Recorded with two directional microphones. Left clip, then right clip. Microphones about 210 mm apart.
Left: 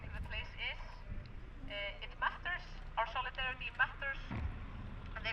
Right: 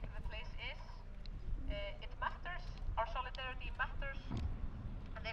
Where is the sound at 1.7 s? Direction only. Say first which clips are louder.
Left 4 dB; 5° left (ahead or behind).